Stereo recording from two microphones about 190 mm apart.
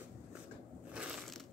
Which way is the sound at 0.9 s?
5° right (ahead or behind).